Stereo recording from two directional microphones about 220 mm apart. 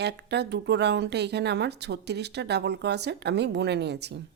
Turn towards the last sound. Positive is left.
turn(degrees=-50)  # may be behind; listen again after turning